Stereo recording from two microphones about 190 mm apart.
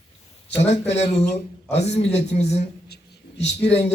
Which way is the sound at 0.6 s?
35° left (ahead or behind).